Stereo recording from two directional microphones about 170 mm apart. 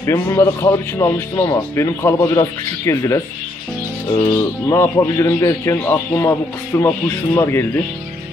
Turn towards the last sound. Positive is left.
turn(degrees=15)  # may be behind; listen again after turning